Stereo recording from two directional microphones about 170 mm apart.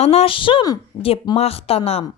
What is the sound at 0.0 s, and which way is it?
A woman's voice, 35° left (ahead or behind).